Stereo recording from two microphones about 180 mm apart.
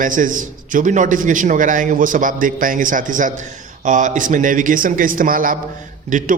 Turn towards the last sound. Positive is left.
turn(degrees=-45)  # may be behind; listen again after turning